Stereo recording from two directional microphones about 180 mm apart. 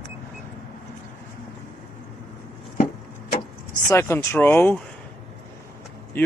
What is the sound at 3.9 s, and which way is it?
Speech, 15° left (ahead or behind).